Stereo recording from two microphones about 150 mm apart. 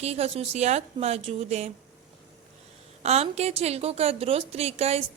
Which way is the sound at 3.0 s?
45° right (ahead or behind).